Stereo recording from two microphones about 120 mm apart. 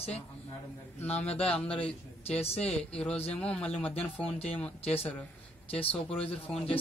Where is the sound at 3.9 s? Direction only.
55° left (ahead or behind).